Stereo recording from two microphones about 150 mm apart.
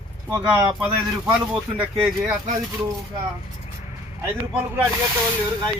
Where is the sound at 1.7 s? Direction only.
10° right (ahead or behind).